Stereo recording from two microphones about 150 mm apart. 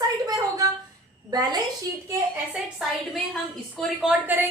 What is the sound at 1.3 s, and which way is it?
Speech, 25° right (ahead or behind).